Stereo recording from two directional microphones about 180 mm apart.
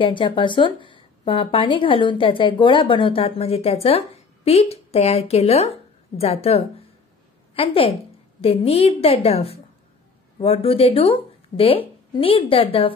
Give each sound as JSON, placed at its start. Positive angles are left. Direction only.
{"t": 0.0, "sound": "a woman's voice", "side_deg": 25}